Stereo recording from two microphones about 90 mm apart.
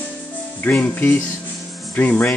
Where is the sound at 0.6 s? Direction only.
15° left (ahead or behind).